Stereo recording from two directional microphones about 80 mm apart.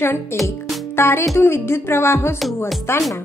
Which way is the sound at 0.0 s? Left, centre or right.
Left.